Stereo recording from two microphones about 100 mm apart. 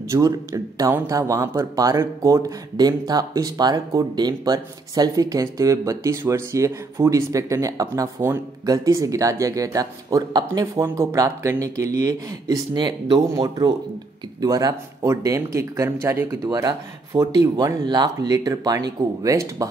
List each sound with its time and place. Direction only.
0.1 s speech: 35° right (ahead or behind)